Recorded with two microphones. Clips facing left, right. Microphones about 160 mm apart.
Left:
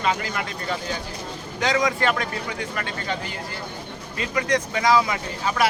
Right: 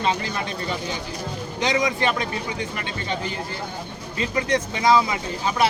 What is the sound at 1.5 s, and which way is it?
Speech, 20° right (ahead or behind).